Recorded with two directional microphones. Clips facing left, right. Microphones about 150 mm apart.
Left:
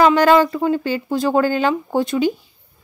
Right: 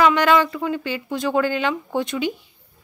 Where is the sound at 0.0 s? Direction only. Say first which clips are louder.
Left 4 dB; 35° left (ahead or behind).